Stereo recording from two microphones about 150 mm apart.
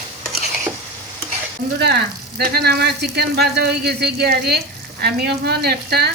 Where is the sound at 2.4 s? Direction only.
90° right.